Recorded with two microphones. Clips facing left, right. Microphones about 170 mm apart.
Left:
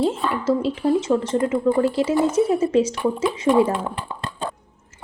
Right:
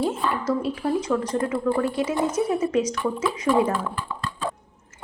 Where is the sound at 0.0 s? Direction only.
25° left (ahead or behind).